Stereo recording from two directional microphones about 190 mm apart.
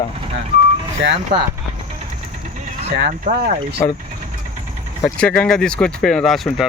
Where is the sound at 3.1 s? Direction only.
40° right (ahead or behind).